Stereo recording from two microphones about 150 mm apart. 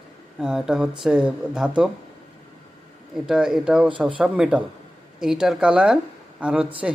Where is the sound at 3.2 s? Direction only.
5° right (ahead or behind).